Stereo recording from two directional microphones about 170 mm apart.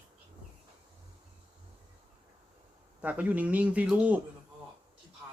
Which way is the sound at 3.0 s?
10° right (ahead or behind).